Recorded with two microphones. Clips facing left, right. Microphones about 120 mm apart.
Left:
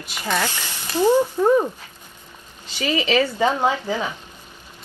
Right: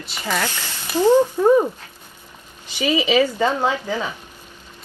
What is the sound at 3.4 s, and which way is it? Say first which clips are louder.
Speech: even; 15° left (ahead or behind).